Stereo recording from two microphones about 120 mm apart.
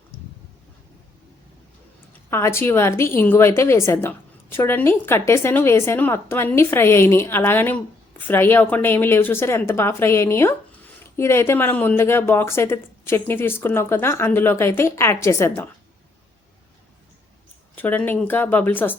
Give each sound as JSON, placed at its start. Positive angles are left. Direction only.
{"t": 2.3, "sound": "a woman's voice", "side_deg": 20}
{"t": 17.7, "sound": "speech", "side_deg": 15}